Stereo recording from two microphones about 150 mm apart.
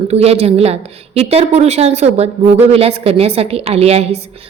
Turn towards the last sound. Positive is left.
turn(degrees=-45)  # may be behind; listen again after turning